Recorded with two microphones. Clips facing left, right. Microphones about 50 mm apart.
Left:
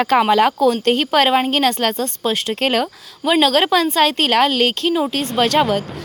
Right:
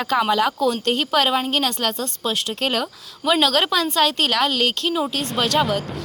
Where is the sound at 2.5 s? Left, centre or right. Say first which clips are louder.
Left 6 dB; left.